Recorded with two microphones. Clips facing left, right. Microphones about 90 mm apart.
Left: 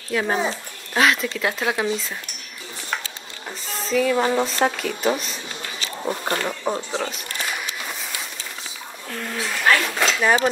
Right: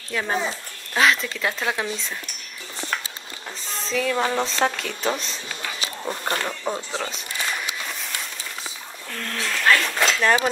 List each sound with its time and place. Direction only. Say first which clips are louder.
0.1 s speech: left 3 dB; 10° left (ahead or behind)
3.8 s speech: left 4 dB; 5° left (ahead or behind)
9.1 s speech: left 1 dB; 10° left (ahead or behind)